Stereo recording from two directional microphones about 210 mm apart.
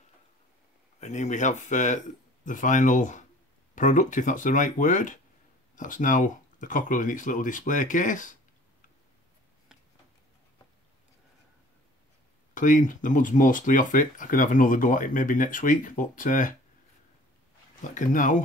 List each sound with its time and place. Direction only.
1.0 s speech: 35° left (ahead or behind)
12.5 s speech: 40° left (ahead or behind)
17.8 s speech: 40° left (ahead or behind)